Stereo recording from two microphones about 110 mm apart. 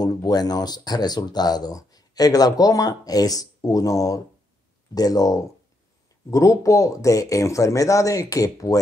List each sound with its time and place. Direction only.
0.0 s speech: 35° left (ahead or behind)